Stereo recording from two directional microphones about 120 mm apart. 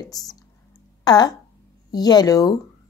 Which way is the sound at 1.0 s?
35° left (ahead or behind).